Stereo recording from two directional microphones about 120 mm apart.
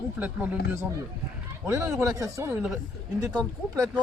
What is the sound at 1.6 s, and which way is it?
Speech, 25° right (ahead or behind).